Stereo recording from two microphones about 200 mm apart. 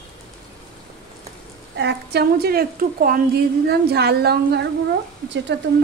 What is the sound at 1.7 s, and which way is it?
A woman's voice, 55° right (ahead or behind).